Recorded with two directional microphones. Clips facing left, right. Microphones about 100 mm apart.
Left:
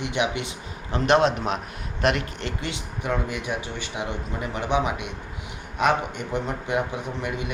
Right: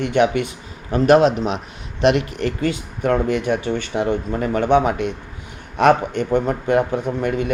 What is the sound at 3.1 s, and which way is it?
Speech, 55° right (ahead or behind).